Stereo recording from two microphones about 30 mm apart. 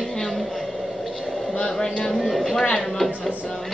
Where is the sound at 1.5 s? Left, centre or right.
Left.